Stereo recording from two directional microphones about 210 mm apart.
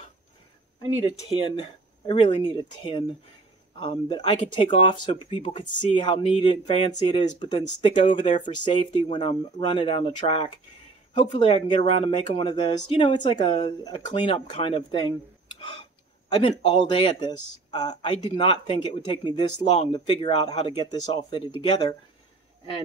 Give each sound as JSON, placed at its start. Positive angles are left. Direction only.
{"t": 1.1, "sound": "speech", "side_deg": 20}
{"t": 15.6, "sound": "a sound", "side_deg": 25}
{"t": 16.3, "sound": "speech", "side_deg": 20}